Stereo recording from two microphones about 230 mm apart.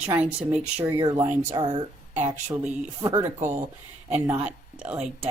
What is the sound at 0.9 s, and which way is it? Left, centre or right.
Speech, centre.